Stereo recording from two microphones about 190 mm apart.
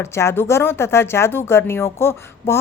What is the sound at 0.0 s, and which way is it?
A woman's voice, 15° left (ahead or behind).